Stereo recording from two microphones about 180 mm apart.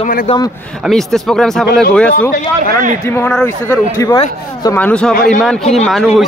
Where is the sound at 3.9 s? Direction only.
20° left (ahead or behind).